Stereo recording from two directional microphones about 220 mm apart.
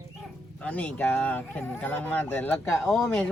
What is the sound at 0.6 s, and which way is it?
Speech, 5° left (ahead or behind).